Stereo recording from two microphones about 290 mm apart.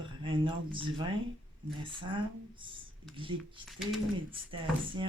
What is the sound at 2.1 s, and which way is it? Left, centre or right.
Speech, centre.